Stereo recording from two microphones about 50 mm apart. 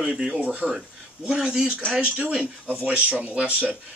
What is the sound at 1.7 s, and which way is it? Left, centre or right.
Speech, right.